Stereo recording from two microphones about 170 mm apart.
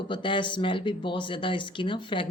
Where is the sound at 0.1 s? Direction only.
30° left (ahead or behind).